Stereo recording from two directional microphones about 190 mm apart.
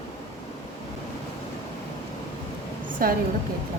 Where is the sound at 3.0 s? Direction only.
50° right (ahead or behind).